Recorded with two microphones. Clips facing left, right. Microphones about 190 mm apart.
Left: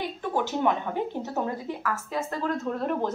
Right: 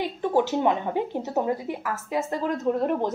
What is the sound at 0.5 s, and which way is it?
A woman's voice, 20° right (ahead or behind).